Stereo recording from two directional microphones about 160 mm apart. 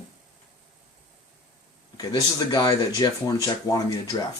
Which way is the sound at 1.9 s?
25° left (ahead or behind).